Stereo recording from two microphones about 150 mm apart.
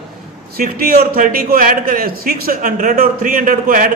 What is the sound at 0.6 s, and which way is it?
A man's voice, 65° right (ahead or behind).